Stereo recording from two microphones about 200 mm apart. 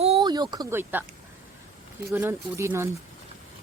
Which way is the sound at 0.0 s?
25° right (ahead or behind).